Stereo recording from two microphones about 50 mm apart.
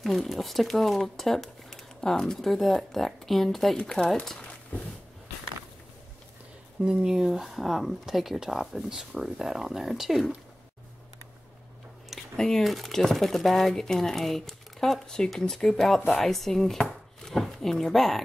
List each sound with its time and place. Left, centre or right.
0.0 s speech: centre
6.8 s speech: centre
7.2 s speech: centre
12.4 s speech: centre
16.1 s chopping: centre
17.3 s speech: centre